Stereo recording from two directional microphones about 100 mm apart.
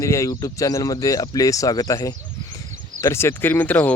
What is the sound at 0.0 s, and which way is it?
Speech, 30° left (ahead or behind).